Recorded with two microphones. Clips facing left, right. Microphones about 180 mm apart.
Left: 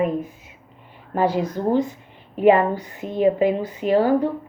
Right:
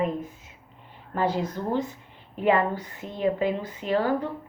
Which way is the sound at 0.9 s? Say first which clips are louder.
Left 5 dB; 10° left (ahead or behind).